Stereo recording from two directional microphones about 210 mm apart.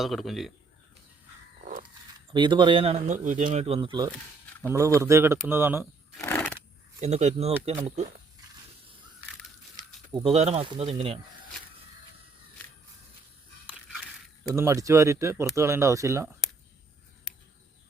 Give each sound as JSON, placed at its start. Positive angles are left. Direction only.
{"t": 0.0, "sound": "a man's voice", "side_deg": 0}
{"t": 2.3, "sound": "speech", "side_deg": -20}
{"t": 6.1, "sound": "a sound", "side_deg": 10}
{"t": 7.0, "sound": "speech", "side_deg": -30}
{"t": 10.2, "sound": "speech", "side_deg": -30}
{"t": 14.5, "sound": "speech", "side_deg": -15}